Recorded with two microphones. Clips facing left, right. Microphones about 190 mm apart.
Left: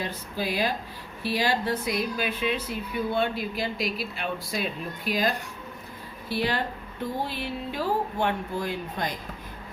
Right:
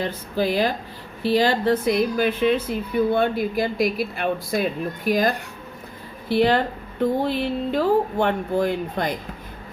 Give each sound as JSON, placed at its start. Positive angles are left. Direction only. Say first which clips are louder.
{"t": 0.3, "sound": "speech", "louder": "right 6 dB", "side_deg": -50}
{"t": 6.3, "sound": "speech", "louder": "right 9 dB", "side_deg": -60}